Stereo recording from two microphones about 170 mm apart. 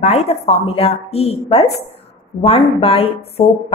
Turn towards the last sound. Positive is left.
turn(degrees=35)  # may be behind; listen again after turning